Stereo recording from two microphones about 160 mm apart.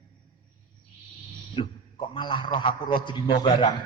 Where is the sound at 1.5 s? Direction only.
30° left (ahead or behind).